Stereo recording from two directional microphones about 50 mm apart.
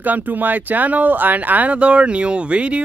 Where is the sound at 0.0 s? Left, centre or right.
Right.